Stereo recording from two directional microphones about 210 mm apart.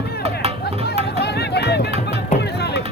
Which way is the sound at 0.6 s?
50° left (ahead or behind).